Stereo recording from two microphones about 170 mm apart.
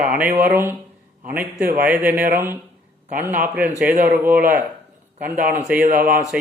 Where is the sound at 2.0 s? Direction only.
55° right (ahead or behind).